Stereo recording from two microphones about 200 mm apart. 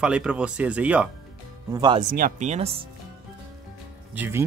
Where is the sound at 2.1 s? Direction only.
40° right (ahead or behind).